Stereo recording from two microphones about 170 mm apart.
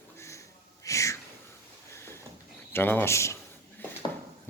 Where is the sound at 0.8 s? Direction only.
20° left (ahead or behind).